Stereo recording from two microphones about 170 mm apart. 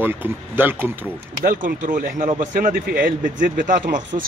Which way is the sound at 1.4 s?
50° right (ahead or behind).